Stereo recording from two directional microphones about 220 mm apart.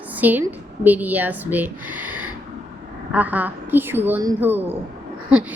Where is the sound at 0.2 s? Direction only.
10° right (ahead or behind).